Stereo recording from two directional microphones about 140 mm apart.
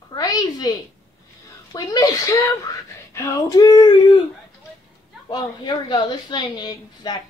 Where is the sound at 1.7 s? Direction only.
25° left (ahead or behind).